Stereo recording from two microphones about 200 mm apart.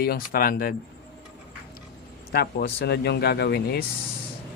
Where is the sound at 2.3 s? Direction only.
55° left (ahead or behind).